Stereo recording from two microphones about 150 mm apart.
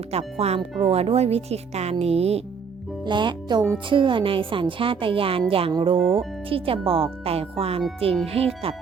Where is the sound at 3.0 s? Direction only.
30° right (ahead or behind).